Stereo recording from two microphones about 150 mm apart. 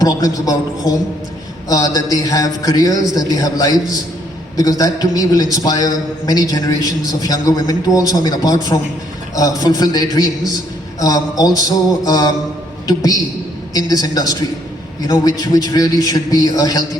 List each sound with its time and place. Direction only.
0.0 s a man's voice: 25° left (ahead or behind)